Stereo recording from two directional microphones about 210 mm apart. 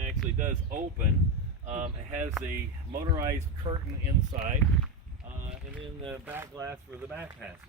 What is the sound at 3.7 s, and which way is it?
Speech, 35° right (ahead or behind).